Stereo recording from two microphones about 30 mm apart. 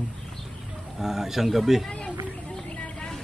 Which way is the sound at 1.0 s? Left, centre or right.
Centre.